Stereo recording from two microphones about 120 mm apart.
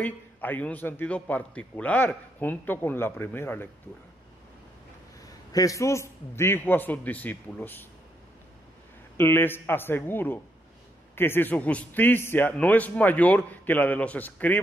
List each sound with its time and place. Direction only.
0.0 s a man's voice: 15° left (ahead or behind)
5.2 s a man's voice: 30° left (ahead or behind); by 7.8 s 15° left (ahead or behind)
9.1 s a man's voice: 20° left (ahead or behind)